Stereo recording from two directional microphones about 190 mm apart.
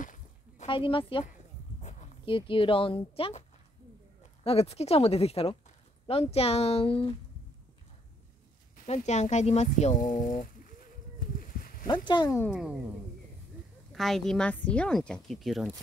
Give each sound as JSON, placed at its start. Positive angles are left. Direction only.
{"t": 0.0, "sound": "a sound", "side_deg": 45}
{"t": 0.7, "sound": "speech", "side_deg": 25}
{"t": 4.5, "sound": "speech", "side_deg": 30}
{"t": 8.7, "sound": "a sound", "side_deg": 35}
{"t": 11.9, "sound": "speech", "side_deg": 25}
{"t": 12.4, "sound": "a woman's voice", "side_deg": 0}
{"t": 13.9, "sound": "a woman's voice", "side_deg": 0}